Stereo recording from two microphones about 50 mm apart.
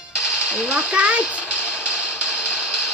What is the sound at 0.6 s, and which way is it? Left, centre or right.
Speech, right.